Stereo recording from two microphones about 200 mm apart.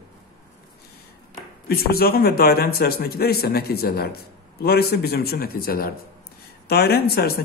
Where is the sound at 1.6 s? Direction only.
50° left (ahead or behind).